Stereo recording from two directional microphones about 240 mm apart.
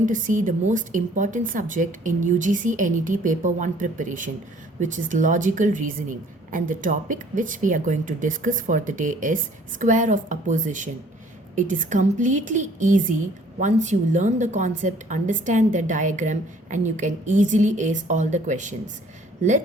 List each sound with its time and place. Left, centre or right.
0.0 s a woman's voice: right